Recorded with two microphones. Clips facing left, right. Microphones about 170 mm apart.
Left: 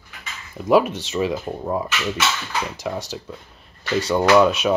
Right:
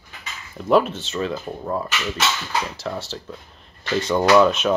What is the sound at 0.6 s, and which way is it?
Speech, 10° left (ahead or behind).